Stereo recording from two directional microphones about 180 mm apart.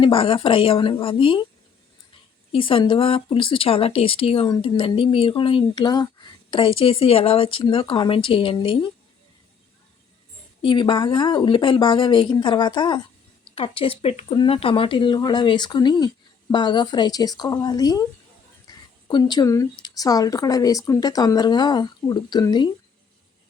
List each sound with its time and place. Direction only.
0.0 s speech: 30° left (ahead or behind)
2.5 s speech: 30° left (ahead or behind)
10.6 s speech: 30° left (ahead or behind)
18.7 s a sound: 20° left (ahead or behind)
19.8 s speech: 20° left (ahead or behind)